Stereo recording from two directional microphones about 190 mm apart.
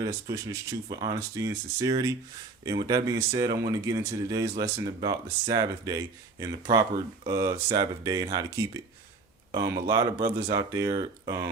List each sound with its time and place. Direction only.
0.0 s speech: 20° right (ahead or behind)